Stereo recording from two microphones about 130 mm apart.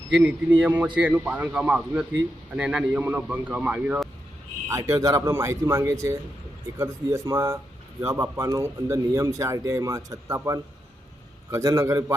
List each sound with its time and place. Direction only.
0.1 s a man's voice: 10° right (ahead or behind)
4.7 s a man's voice: 25° right (ahead or behind)